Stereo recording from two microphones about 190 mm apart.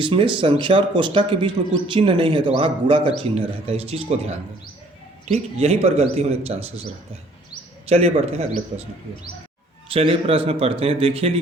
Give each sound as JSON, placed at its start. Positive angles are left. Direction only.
{"t": 0.0, "sound": "a man's voice", "side_deg": -25}
{"t": 7.9, "sound": "speech", "side_deg": -30}
{"t": 9.9, "sound": "speech", "side_deg": -30}